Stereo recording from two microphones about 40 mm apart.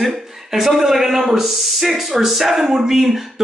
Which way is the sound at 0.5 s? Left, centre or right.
Centre.